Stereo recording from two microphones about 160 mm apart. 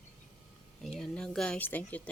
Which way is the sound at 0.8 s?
Centre (ahead or behind).